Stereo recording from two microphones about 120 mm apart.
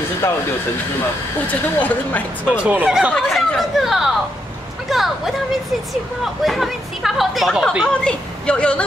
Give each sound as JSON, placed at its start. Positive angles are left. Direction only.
{"t": 1.5, "sound": "a woman's voice", "side_deg": 15}
{"t": 2.4, "sound": "speech", "side_deg": -10}
{"t": 2.9, "sound": "speech", "side_deg": 0}
{"t": 4.8, "sound": "a sound", "side_deg": 0}
{"t": 6.4, "sound": "a woman's voice", "side_deg": 0}